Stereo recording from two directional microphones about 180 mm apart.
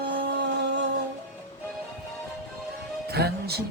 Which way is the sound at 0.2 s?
75° right (ahead or behind).